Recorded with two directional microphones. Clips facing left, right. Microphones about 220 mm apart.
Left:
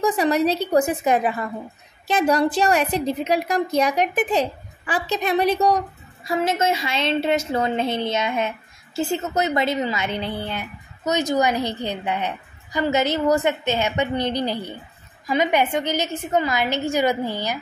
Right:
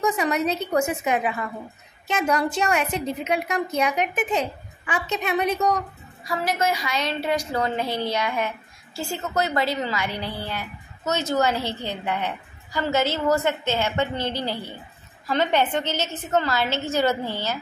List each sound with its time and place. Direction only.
0.0 s a woman's voice: 35° left (ahead or behind)
6.2 s a woman's voice: 25° left (ahead or behind)